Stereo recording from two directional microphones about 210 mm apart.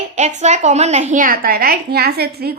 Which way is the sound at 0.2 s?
35° right (ahead or behind).